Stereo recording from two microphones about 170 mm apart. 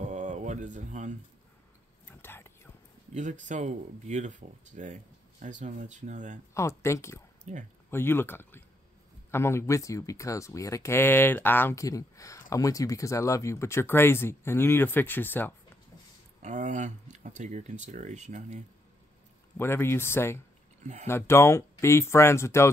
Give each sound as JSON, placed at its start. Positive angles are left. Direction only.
{"t": 0.0, "sound": "a sound", "side_deg": -45}
{"t": 2.0, "sound": "whispering", "side_deg": 15}
{"t": 3.2, "sound": "speech", "side_deg": -45}
{"t": 6.5, "sound": "speech", "side_deg": 15}
{"t": 7.5, "sound": "speech", "side_deg": -45}
{"t": 7.9, "sound": "speech", "side_deg": 15}
{"t": 16.4, "sound": "speech", "side_deg": -50}
{"t": 19.5, "sound": "speech", "side_deg": 15}
{"t": 20.8, "sound": "speech", "side_deg": -40}
{"t": 21.1, "sound": "speech", "side_deg": 15}